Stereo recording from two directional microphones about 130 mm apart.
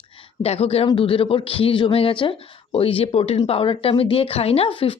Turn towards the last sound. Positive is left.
turn(degrees=45)  # may be behind; listen again after turning